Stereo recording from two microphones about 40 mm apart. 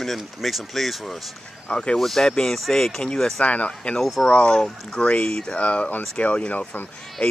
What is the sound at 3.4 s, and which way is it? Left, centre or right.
Speech, left.